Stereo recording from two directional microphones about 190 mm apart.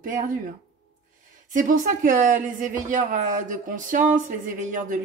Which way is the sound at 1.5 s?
45° right (ahead or behind).